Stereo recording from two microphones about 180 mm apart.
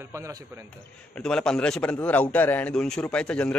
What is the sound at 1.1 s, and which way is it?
A man's voice, 5° left (ahead or behind).